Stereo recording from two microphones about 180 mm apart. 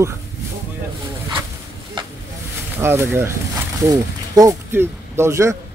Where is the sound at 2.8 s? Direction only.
15° right (ahead or behind).